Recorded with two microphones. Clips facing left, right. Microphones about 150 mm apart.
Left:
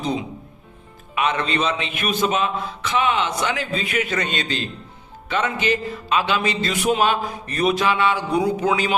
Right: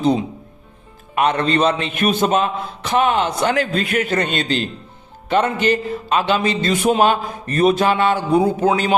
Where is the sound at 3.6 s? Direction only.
60° right (ahead or behind).